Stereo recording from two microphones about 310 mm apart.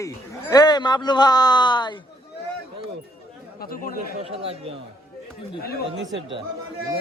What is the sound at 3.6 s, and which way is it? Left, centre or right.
Speech, left.